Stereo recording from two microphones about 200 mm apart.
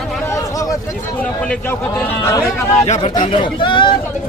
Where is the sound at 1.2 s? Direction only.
5° left (ahead or behind).